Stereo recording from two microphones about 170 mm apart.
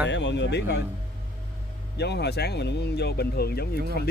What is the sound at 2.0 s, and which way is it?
Speech, 75° left (ahead or behind).